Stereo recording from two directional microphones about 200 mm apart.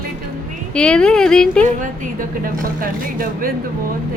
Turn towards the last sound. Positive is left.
turn(degrees=-45)  # may be behind; listen again after turning